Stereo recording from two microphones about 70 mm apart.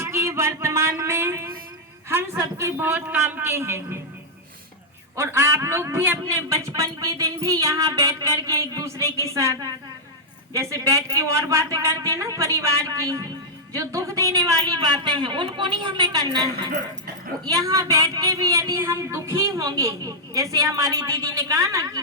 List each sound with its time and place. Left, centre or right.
0.0 s a sound: right
2.0 s a man's voice: right
2.7 s a man's voice: right
5.1 s a man's voice: right
14.6 s a woman's voice: right
17.4 s a woman's voice: right